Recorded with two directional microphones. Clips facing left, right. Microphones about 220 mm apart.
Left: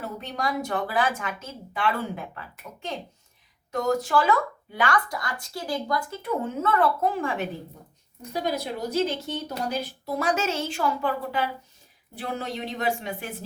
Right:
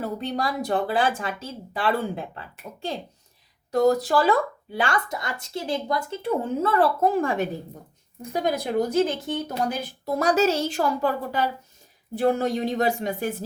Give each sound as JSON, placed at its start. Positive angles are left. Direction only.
{"t": 0.0, "sound": "a woman's voice", "side_deg": -35}